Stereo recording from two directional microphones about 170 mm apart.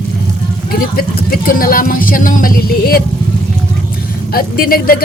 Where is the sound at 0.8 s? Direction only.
60° left (ahead or behind).